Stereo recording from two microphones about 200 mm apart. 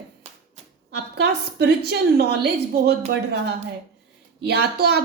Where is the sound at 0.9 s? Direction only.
55° right (ahead or behind).